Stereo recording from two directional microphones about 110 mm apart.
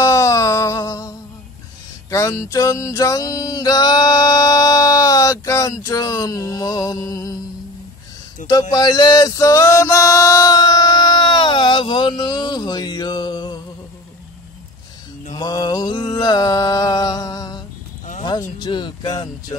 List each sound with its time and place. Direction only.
0.0 s music: 30° left (ahead or behind)
8.5 s male singing: 35° left (ahead or behind)
15.3 s music: 40° left (ahead or behind)
18.6 s speech: 45° left (ahead or behind)